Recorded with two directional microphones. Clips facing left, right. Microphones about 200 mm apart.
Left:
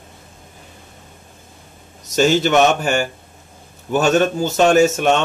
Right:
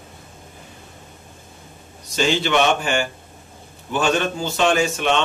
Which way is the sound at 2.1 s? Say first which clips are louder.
Left 5 dB; 45° left (ahead or behind).